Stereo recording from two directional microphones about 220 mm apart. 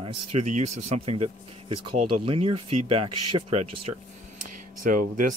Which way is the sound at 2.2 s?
25° right (ahead or behind).